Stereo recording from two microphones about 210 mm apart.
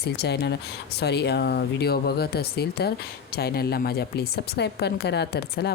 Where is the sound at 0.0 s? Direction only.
50° left (ahead or behind).